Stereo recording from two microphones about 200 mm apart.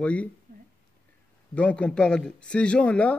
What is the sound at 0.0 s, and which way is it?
Speech, 5° left (ahead or behind).